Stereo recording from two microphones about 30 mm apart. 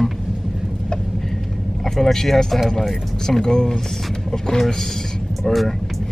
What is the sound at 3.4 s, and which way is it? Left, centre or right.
Speech, left.